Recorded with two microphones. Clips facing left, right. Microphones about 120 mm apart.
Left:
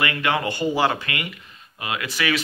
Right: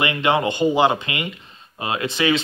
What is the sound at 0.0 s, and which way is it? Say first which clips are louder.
Speech: right 4 dB; 20° right (ahead or behind).